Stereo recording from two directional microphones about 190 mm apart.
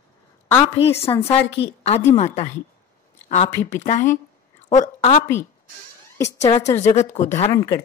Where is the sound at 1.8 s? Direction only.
35° left (ahead or behind).